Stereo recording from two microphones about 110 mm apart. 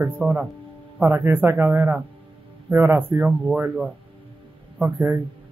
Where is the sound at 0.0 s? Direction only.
10° right (ahead or behind).